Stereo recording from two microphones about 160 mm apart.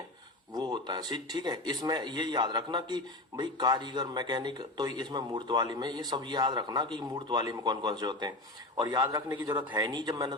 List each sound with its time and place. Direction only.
0.5 s speech: 25° right (ahead or behind)